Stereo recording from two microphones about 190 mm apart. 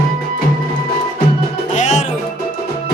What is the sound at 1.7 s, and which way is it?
Music, 40° left (ahead or behind).